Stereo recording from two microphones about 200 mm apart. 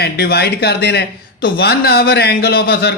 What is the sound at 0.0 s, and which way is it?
Speech, 55° left (ahead or behind).